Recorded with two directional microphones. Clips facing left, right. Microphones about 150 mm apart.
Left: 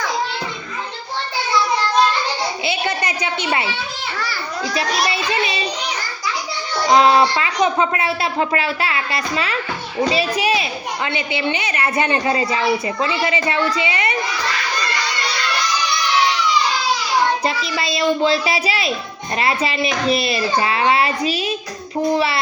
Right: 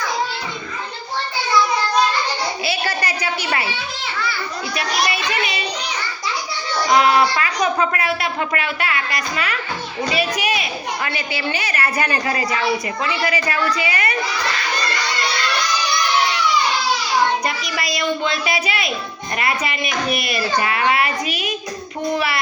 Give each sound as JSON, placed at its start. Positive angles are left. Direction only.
{"t": 2.6, "sound": "a woman's voice", "side_deg": 20}
{"t": 4.2, "sound": "a child's voice", "side_deg": 40}
{"t": 17.4, "sound": "a woman's voice", "side_deg": 30}